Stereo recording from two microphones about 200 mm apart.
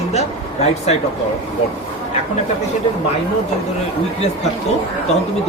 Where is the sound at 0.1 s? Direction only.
35° left (ahead or behind).